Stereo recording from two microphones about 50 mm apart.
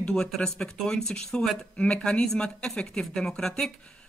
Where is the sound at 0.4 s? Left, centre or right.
Centre.